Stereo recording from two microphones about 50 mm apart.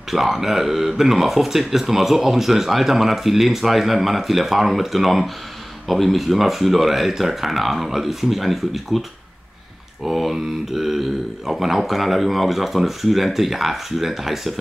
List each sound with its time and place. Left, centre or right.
0.1 s speech: centre
10.0 s speech: centre